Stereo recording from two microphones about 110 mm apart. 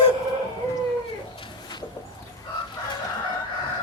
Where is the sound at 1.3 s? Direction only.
45° left (ahead or behind).